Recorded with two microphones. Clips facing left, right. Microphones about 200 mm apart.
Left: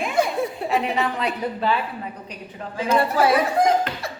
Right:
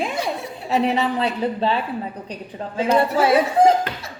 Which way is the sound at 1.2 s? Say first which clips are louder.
Right 3 dB; 30° right (ahead or behind).